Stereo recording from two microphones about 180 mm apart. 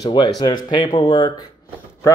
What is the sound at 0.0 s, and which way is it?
Speech, 25° left (ahead or behind).